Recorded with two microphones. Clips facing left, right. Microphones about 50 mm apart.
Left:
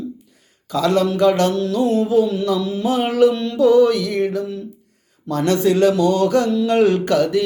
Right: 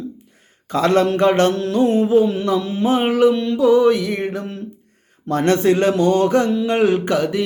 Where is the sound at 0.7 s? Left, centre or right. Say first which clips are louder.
Right 2 dB; right.